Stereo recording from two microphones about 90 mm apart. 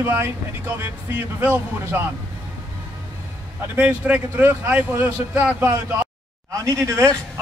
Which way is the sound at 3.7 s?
15° right (ahead or behind).